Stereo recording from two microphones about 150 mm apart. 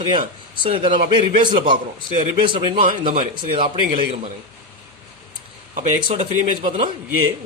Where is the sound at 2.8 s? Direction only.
60° right (ahead or behind).